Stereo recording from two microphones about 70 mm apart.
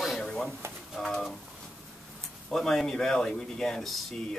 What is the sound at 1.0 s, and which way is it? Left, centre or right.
Pigeon, centre.